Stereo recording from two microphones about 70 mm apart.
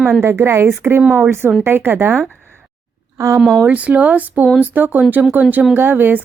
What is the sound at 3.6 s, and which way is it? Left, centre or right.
Speech, right.